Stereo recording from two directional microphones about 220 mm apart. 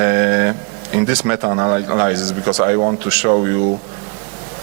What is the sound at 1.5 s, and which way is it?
Speech, 25° right (ahead or behind).